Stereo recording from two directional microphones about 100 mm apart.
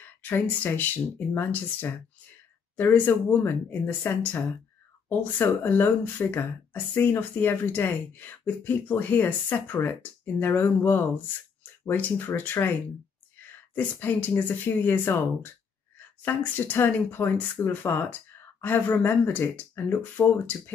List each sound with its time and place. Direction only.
0.2 s speech: 20° left (ahead or behind)
13.7 s speech: 15° left (ahead or behind)